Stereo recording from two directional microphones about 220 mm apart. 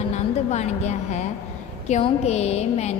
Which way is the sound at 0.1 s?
30° left (ahead or behind).